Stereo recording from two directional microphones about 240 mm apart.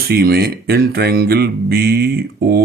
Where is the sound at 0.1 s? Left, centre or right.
Right.